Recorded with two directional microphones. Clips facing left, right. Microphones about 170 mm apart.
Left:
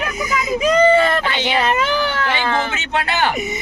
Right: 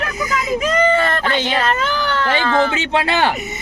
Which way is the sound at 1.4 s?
10° left (ahead or behind).